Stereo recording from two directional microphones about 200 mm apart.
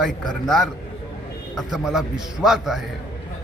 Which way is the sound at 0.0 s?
Centre (ahead or behind).